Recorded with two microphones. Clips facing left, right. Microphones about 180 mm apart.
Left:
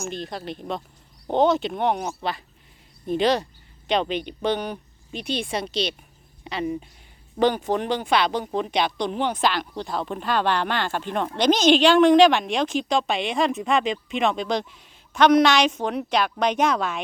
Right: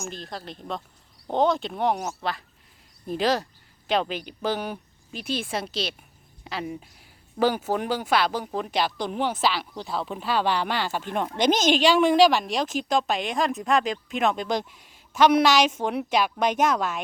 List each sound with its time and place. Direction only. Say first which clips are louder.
0.0 s speech: left 4 dB; centre (ahead or behind)
11.3 s a woman's voice: left 4 dB; 50° right (ahead or behind)
11.8 s speech: left 3 dB; 5° right (ahead or behind)